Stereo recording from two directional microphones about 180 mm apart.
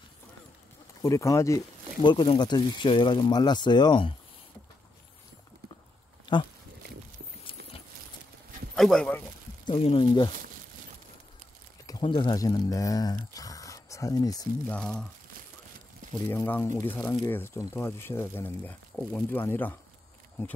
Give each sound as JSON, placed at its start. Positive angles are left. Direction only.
{"t": 1.0, "sound": "speech", "side_deg": 15}
{"t": 2.0, "sound": "speech", "side_deg": 25}
{"t": 6.3, "sound": "speech", "side_deg": 25}
{"t": 8.7, "sound": "speech", "side_deg": 5}
{"t": 9.7, "sound": "speech", "side_deg": 25}
{"t": 11.8, "sound": "speech", "side_deg": 25}
{"t": 14.7, "sound": "speech", "side_deg": 5}
{"t": 16.3, "sound": "speech", "side_deg": 10}